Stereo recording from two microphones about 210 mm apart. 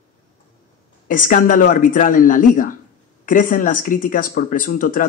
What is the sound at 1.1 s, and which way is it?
Speech, 40° left (ahead or behind).